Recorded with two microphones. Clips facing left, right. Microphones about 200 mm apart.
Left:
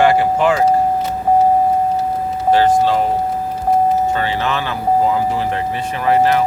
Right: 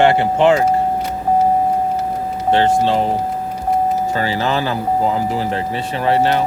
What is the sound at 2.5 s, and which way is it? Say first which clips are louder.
Speech: left 1 dB; 25° right (ahead or behind).